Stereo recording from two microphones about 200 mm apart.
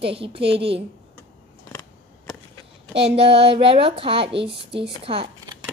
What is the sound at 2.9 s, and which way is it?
A woman's voice, 30° right (ahead or behind).